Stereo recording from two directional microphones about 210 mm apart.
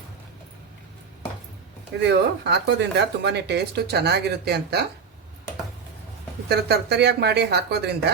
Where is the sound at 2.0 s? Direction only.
55° right (ahead or behind).